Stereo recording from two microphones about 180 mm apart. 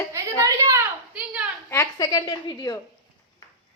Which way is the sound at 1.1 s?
5° right (ahead or behind).